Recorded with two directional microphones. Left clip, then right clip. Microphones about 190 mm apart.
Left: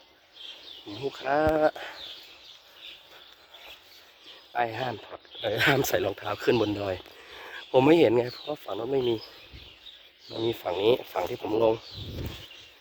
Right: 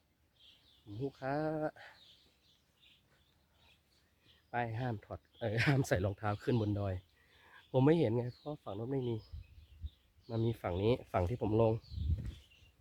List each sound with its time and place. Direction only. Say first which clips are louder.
0.9 s speech: left 10 dB; 5° right (ahead or behind)
4.6 s speech: left 11 dB; 15° right (ahead or behind)
10.4 s speech: left 10 dB; 20° right (ahead or behind)